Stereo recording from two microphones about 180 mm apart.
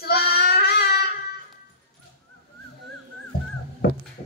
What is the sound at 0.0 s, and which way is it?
Child singing, 60° left (ahead or behind).